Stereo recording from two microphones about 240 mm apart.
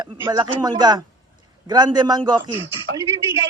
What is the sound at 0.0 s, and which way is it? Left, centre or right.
A man's voice, centre.